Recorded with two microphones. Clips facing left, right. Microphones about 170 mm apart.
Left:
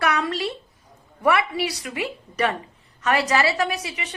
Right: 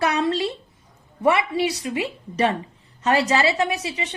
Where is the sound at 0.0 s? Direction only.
30° right (ahead or behind).